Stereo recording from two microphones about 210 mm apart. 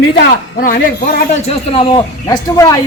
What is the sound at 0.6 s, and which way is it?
A man's voice, 40° left (ahead or behind).